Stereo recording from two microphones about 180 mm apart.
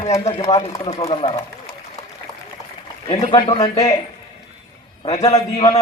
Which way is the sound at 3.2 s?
35° left (ahead or behind).